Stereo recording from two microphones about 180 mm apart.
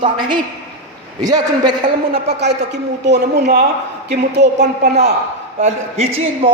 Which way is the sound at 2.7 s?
70° right (ahead or behind).